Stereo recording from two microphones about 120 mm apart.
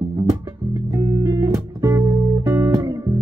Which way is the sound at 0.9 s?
30° right (ahead or behind).